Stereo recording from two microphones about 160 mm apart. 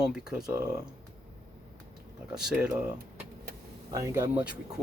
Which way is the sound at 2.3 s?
5° right (ahead or behind).